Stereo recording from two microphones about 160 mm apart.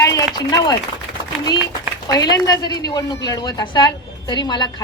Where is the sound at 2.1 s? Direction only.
25° left (ahead or behind).